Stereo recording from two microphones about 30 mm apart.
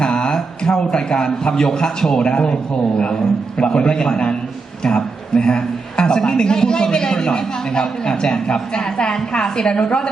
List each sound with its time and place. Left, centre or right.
0.0 s a sound: left
0.9 s a man's voice: left
3.6 s a man's voice: left